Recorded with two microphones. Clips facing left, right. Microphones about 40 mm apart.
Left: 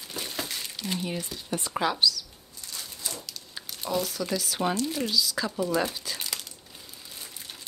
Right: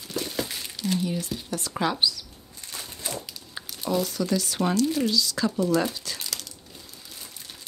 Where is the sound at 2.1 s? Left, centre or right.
Right.